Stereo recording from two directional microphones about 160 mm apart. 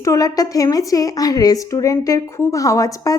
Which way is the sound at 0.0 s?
20° left (ahead or behind).